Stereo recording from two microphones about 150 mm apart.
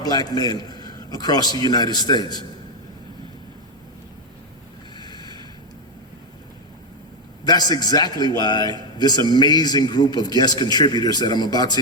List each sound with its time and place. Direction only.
0.0 s a man's voice: 25° left (ahead or behind)
4.9 s a sound: 30° left (ahead or behind)
7.4 s a man's voice: 25° left (ahead or behind)